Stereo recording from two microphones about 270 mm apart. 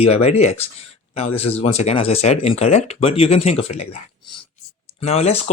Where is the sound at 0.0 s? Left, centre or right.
Left.